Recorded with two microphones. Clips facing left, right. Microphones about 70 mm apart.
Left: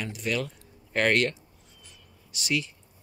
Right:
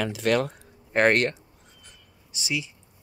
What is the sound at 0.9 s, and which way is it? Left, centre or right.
Speech, right.